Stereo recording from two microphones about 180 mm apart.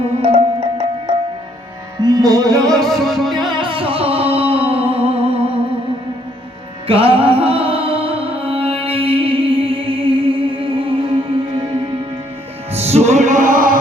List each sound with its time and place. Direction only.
0.2 s music: 30° right (ahead or behind)
2.6 s music: centre (ahead or behind)
3.4 s music: 25° right (ahead or behind)
6.8 s music: 30° right (ahead or behind)
12.9 s music: 40° right (ahead or behind)